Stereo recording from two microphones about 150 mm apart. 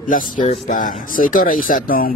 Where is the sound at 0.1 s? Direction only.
60° left (ahead or behind).